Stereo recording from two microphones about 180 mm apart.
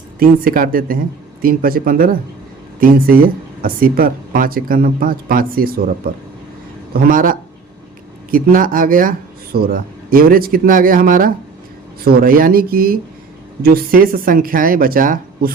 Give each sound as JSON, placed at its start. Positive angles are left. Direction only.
{"t": 0.2, "sound": "speech", "side_deg": -50}
{"t": 6.9, "sound": "speech", "side_deg": -50}